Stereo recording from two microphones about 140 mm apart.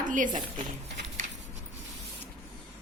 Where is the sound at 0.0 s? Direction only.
70° right (ahead or behind).